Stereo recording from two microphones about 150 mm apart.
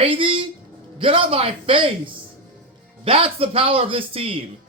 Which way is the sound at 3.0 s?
40° right (ahead or behind).